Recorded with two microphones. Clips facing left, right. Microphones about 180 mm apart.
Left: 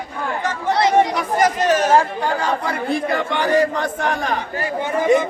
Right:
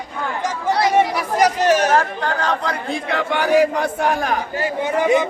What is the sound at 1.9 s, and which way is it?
Speech, 15° left (ahead or behind).